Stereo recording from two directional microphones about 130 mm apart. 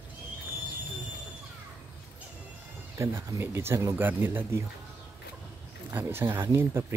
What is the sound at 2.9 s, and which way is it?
Speech, 20° right (ahead or behind).